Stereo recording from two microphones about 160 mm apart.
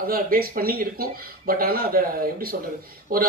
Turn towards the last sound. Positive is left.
turn(degrees=-65)  # may be behind; listen again after turning